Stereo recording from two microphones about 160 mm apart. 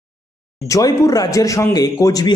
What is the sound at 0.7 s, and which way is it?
Speech, 20° left (ahead or behind).